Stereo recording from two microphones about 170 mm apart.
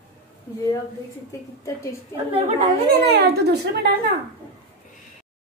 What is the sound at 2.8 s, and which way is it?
Speech, 70° right (ahead or behind).